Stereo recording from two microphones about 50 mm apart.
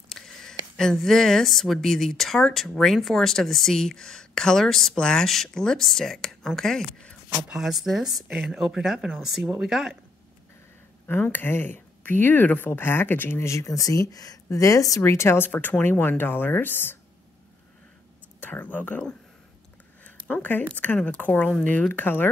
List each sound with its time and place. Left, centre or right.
0.1 s speech: centre
7.5 s speech: centre
11.1 s speech: left
13.4 s speech: left
15.0 s speech: left
15.3 s speech: left
18.4 s speech: left